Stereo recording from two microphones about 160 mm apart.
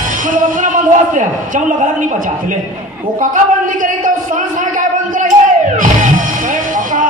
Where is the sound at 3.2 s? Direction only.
55° right (ahead or behind).